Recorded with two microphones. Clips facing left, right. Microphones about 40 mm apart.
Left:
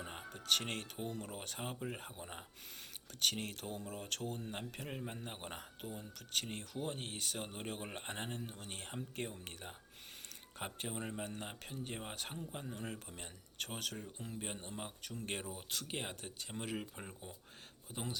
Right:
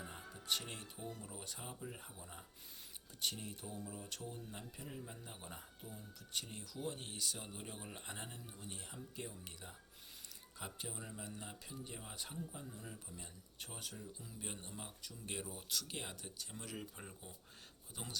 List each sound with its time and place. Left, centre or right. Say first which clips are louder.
0.0 s speech: left 4 dB; left
3.2 s speech: left 6 dB; left
14.4 s speech: left 2 dB; left
15.0 s speech: left 4 dB; left
17.9 s speech: left 5 dB; left